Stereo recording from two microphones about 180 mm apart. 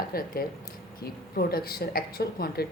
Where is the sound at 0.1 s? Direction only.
55° left (ahead or behind).